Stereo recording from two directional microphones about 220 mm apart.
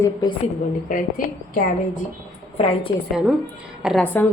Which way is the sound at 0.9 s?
35° left (ahead or behind).